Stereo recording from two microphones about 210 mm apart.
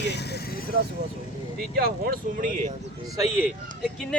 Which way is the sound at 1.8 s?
45° right (ahead or behind).